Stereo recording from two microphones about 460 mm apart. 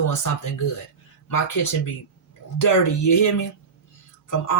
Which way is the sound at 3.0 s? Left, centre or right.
Left.